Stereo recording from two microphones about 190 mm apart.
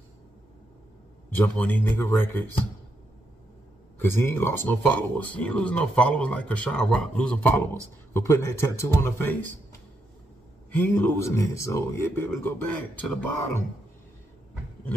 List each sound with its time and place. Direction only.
1.3 s speech: 10° left (ahead or behind)
4.0 s speech: 10° left (ahead or behind)
10.7 s speech: 10° left (ahead or behind)